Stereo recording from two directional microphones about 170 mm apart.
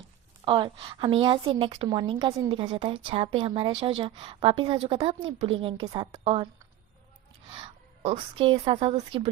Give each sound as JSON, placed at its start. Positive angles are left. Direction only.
{"t": 0.4, "sound": "a woman's voice", "side_deg": -30}
{"t": 7.5, "sound": "a woman's voice", "side_deg": -35}